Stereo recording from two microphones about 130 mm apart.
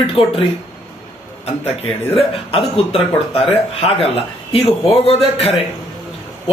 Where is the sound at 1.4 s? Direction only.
50° left (ahead or behind).